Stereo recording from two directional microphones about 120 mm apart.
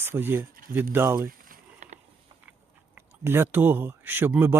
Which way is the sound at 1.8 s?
80° right.